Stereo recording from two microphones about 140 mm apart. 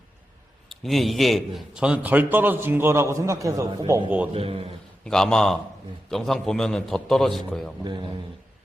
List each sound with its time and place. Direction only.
0.7 s a man's voice: centre (ahead or behind); by 4.0 s 25° right (ahead or behind)
4.3 s a man's voice: 45° right (ahead or behind)
5.0 s a man's voice: 5° left (ahead or behind)